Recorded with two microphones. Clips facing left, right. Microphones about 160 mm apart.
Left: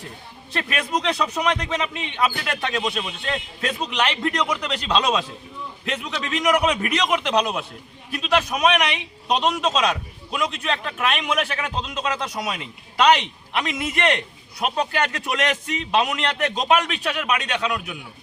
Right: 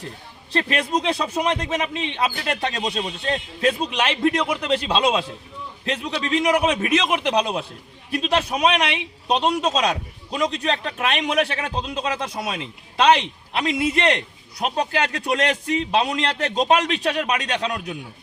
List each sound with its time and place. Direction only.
0.5 s a man's voice: 30° right (ahead or behind)